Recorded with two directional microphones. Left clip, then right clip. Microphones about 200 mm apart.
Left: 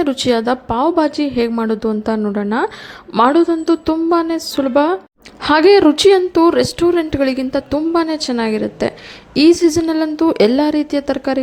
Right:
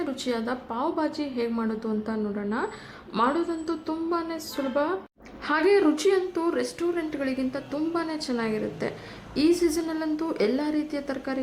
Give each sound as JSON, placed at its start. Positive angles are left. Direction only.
{"t": 0.0, "sound": "a woman's voice", "side_deg": 40}